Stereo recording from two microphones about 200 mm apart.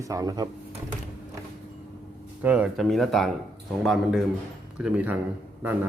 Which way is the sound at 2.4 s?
5° right (ahead or behind).